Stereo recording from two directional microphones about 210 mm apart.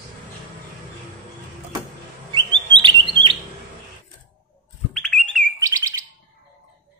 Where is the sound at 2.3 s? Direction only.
20° right (ahead or behind).